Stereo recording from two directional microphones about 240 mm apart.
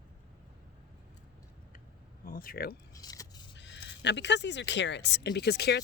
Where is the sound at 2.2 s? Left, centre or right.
Left.